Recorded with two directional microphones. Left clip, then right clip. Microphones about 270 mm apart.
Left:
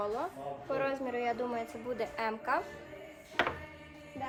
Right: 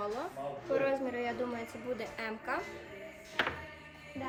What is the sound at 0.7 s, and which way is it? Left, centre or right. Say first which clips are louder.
A woman's voice: right 2 dB; centre.